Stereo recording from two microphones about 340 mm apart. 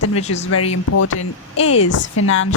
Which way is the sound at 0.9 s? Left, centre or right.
Left.